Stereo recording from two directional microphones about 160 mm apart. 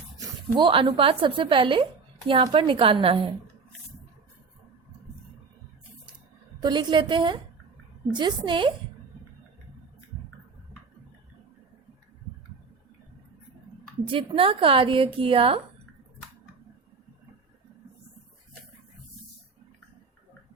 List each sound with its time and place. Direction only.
0.5 s a woman's voice: 30° right (ahead or behind)
6.6 s a woman's voice: 30° right (ahead or behind)
14.1 s a woman's voice: 35° right (ahead or behind)